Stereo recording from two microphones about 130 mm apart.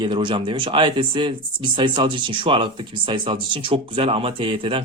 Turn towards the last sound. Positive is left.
turn(degrees=-45)  # may be behind; listen again after turning